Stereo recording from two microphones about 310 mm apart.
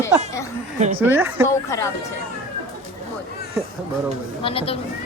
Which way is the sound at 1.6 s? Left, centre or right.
Centre.